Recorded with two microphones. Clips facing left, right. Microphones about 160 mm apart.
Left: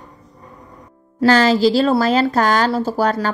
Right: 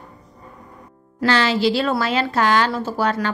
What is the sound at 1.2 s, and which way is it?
A woman's voice, 40° left (ahead or behind).